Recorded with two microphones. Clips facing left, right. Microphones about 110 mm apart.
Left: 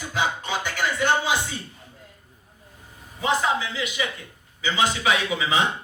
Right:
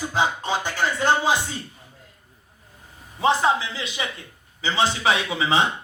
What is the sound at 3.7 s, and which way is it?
A man's voice, 30° right (ahead or behind).